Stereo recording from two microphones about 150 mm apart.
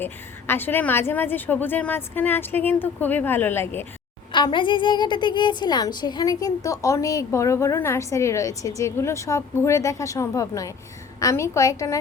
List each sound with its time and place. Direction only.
0.0 s a woman's voice: 15° left (ahead or behind)
4.3 s a woman's voice: 30° left (ahead or behind)